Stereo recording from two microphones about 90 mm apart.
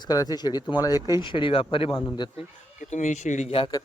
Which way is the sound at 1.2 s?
65° left (ahead or behind).